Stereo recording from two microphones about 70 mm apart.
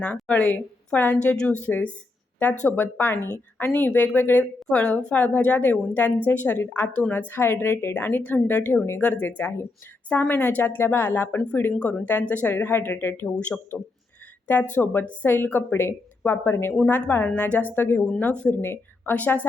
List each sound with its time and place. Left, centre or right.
0.0 s a woman's voice: centre
4.8 s a woman's voice: centre; by 11.3 s left
11.3 s speech: centre
14.4 s a woman's voice: left
16.2 s a woman's voice: left
18.2 s speech: centre
18.5 s speech: left
19.1 s speech: left